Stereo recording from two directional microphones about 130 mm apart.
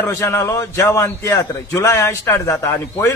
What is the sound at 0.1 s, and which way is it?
A man's voice, 25° left (ahead or behind).